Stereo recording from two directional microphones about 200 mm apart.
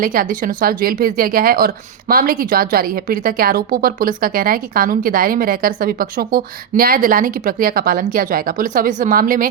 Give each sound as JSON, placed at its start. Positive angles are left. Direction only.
{"t": 0.0, "sound": "a woman's voice", "side_deg": -45}